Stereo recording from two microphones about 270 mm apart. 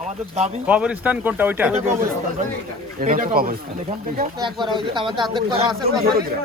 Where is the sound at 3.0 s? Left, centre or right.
Right.